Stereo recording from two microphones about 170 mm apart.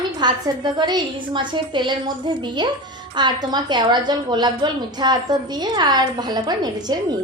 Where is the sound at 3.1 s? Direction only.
25° right (ahead or behind).